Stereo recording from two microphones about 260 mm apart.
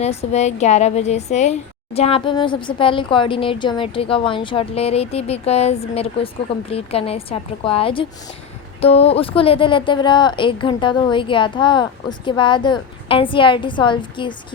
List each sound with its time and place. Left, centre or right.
0.0 s a woman's voice: left